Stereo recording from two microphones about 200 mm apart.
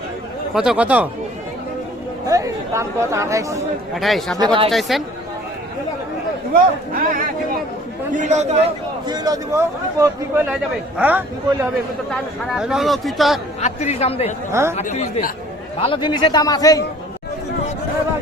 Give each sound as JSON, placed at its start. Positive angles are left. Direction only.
{"t": 0.5, "sound": "speech", "side_deg": -5}
{"t": 2.2, "sound": "speech", "side_deg": -15}
{"t": 3.9, "sound": "speech", "side_deg": 0}
{"t": 4.4, "sound": "speech", "side_deg": -25}
{"t": 4.7, "sound": "speech", "side_deg": 0}
{"t": 6.5, "sound": "speech", "side_deg": -45}
{"t": 9.0, "sound": "a man's voice", "side_deg": -20}
{"t": 13.6, "sound": "speech", "side_deg": 35}
{"t": 14.5, "sound": "a man's voice", "side_deg": -10}
{"t": 14.8, "sound": "speech", "side_deg": 35}
{"t": 15.8, "sound": "a man's voice", "side_deg": 25}